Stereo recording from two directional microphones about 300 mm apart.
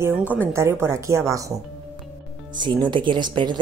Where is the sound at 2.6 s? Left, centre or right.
Centre.